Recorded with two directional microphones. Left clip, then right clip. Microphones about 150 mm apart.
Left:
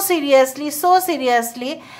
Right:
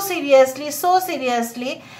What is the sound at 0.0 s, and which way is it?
Speech, 40° left (ahead or behind).